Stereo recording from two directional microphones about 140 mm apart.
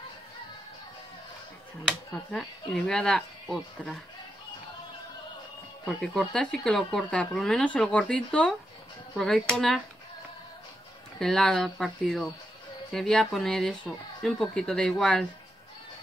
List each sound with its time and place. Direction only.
2.7 s speech: 5° left (ahead or behind)
6.1 s speech: 5° left (ahead or behind)
11.1 s speech: 5° left (ahead or behind)